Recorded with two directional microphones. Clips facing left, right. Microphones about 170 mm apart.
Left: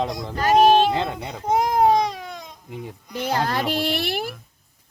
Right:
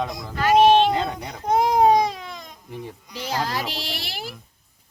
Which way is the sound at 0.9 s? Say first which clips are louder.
Even; 25° left (ahead or behind).